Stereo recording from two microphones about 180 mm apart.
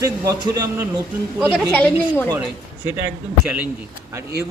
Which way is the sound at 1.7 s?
10° left (ahead or behind).